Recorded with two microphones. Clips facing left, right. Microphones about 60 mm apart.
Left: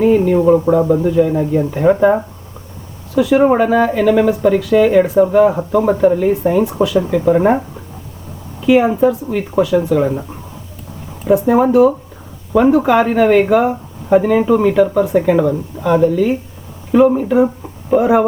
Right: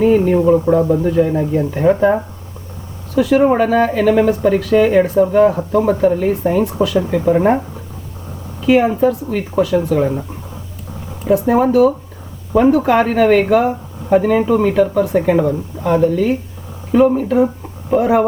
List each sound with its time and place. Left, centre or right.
0.0 s speech: centre
3.9 s speech: centre
6.8 s speech: left
7.3 s speech: centre
8.6 s speech: centre
11.3 s speech: centre
15.0 s speech: centre